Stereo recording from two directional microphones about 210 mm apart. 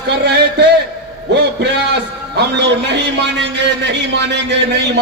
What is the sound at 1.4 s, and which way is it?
A man's voice, 50° right (ahead or behind).